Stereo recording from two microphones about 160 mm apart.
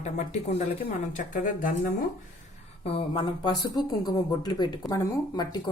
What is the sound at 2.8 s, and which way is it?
Speech, 35° left (ahead or behind).